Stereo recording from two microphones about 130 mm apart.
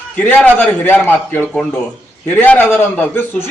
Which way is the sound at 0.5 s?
15° left (ahead or behind).